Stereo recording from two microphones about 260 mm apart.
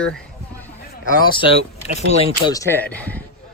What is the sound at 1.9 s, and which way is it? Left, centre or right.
Speech, left.